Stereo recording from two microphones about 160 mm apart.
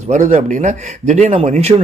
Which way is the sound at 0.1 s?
50° right (ahead or behind).